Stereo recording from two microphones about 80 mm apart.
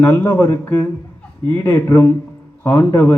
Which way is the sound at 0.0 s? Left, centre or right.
Left.